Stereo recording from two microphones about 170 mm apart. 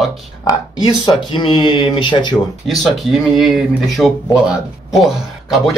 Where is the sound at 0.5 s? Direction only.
25° left (ahead or behind).